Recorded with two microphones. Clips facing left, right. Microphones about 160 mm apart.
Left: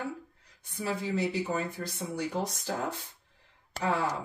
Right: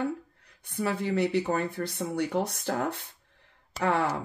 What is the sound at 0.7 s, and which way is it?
Speech, 60° right (ahead or behind).